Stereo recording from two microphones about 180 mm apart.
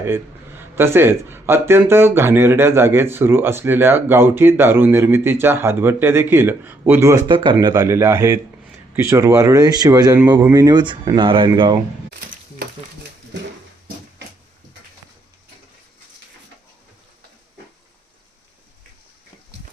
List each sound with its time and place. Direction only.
0.0 s a man's voice: 10° right (ahead or behind)
7.3 s a man's voice: 25° right (ahead or behind)